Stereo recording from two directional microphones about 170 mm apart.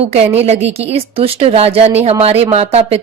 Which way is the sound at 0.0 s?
35° right (ahead or behind).